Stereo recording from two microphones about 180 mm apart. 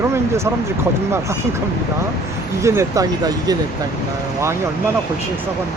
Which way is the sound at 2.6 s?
15° right (ahead or behind).